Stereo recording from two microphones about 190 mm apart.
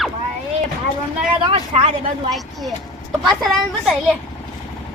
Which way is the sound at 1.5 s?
35° right (ahead or behind).